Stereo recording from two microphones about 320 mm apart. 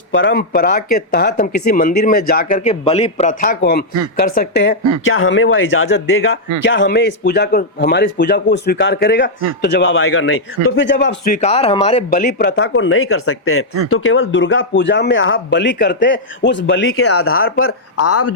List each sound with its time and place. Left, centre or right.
0.1 s speech: left
2.0 s speech: left
11.3 s speech: centre; by 18.3 s left